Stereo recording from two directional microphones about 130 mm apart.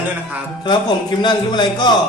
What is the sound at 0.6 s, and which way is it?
Speech, 35° left (ahead or behind).